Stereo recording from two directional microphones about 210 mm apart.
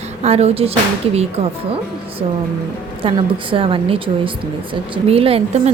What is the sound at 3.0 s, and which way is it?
A woman's voice, 25° right (ahead or behind).